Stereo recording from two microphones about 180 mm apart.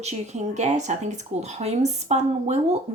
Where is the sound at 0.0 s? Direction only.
40° right (ahead or behind).